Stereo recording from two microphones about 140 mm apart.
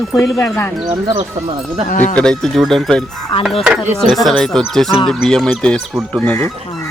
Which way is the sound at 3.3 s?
40° left (ahead or behind).